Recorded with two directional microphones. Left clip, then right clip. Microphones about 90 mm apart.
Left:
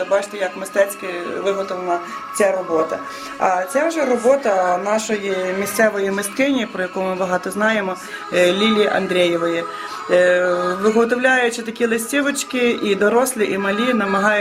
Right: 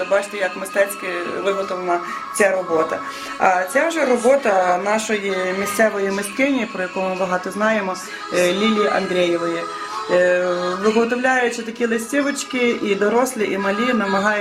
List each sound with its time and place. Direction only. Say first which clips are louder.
0.1 s speech: right 2 dB; 15° left (ahead or behind)
3.4 s speech: right 1 dB; 5° left (ahead or behind); by 14.3 s 35° left (ahead or behind)